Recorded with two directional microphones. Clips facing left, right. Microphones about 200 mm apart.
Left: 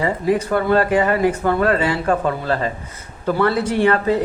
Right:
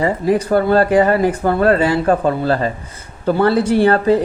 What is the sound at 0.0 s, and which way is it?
Speech, 35° right (ahead or behind).